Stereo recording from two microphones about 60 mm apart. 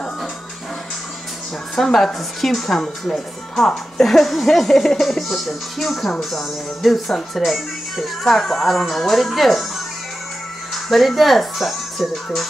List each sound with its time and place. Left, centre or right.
1.8 s a woman's voice: centre
10.7 s speech: centre